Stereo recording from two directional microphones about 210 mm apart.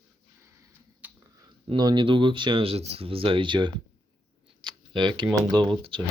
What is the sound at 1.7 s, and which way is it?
Speech, 20° right (ahead or behind).